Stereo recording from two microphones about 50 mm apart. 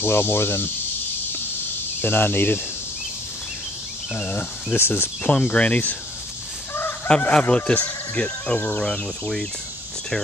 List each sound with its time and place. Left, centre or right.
0.0 s speech: left
2.0 s speech: left
4.1 s speech: left
4.7 s speech: left
5.3 s speech: left
7.1 s speech: centre
7.8 s speech: left